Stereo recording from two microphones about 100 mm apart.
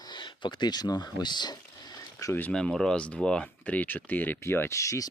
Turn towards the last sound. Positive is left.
turn(degrees=30)  # may be behind; listen again after turning